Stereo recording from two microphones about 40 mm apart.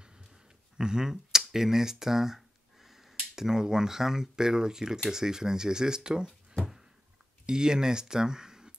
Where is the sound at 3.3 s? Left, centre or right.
Centre.